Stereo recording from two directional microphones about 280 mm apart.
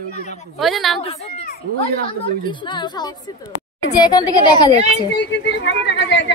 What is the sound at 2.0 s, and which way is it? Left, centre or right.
A woman's voice, centre.